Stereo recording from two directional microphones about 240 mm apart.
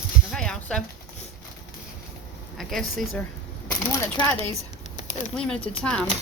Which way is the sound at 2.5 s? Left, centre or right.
Centre.